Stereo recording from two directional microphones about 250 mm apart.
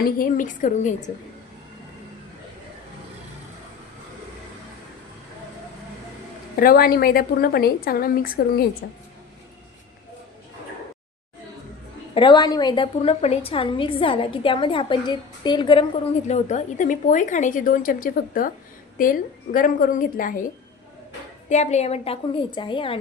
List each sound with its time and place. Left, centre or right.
0.0 s speech: left
6.6 s speech: left
12.1 s a woman's voice: centre
21.5 s a woman's voice: left